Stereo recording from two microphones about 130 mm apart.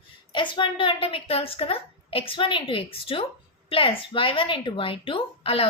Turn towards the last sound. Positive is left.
turn(degrees=45)  # may be behind; listen again after turning